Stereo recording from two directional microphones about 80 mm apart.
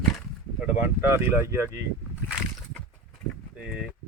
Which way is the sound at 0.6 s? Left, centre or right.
Right.